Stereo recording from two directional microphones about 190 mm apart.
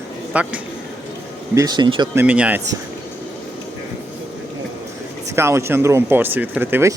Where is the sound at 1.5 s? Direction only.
20° right (ahead or behind).